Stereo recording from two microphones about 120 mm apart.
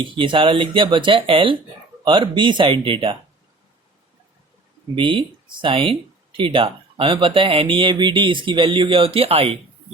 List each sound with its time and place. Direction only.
0.0 s speech: 45° right (ahead or behind)
4.9 s speech: 45° right (ahead or behind)